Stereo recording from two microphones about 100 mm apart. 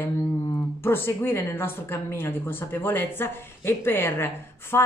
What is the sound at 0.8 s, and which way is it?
A woman's voice, 25° left (ahead or behind).